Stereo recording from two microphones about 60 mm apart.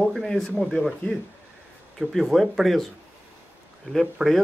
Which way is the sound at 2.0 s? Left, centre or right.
Centre.